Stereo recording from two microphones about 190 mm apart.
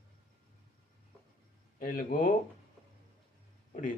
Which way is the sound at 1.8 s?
45° left (ahead or behind).